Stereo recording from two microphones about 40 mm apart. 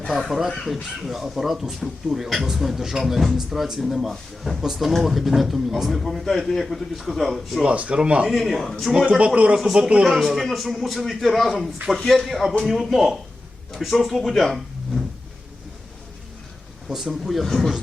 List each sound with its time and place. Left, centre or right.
0.1 s speech: centre
6.2 s speech: centre
7.6 s speech: right
8.3 s speech: centre
9.0 s speech: right
10.0 s a man's voice: centre
16.9 s speech: centre